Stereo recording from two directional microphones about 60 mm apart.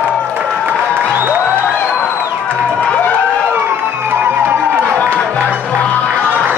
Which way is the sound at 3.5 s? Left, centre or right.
Right.